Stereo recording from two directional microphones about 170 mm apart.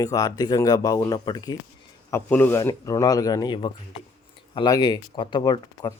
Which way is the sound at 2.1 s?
10° left (ahead or behind).